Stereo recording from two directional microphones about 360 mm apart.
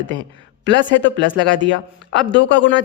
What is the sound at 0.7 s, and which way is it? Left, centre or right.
Speech, left.